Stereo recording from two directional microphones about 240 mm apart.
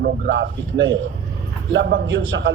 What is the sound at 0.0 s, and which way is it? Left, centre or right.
A man's voice, right.